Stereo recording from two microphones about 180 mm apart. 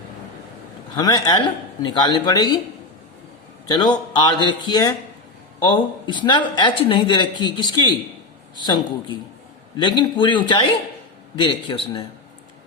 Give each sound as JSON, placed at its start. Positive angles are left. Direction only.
{"t": 0.9, "sound": "speech", "side_deg": 20}
{"t": 3.7, "sound": "speech", "side_deg": 25}